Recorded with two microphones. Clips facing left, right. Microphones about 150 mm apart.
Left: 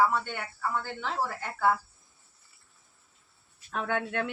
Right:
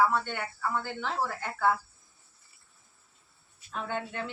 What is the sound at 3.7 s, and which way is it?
Speech, 65° left (ahead or behind).